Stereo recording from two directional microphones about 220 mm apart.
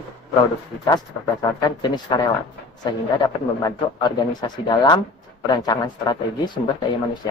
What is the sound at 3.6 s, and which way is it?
Speech, 20° left (ahead or behind).